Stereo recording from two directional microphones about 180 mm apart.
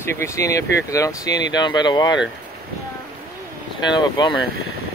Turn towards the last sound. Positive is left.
turn(degrees=25)  # may be behind; listen again after turning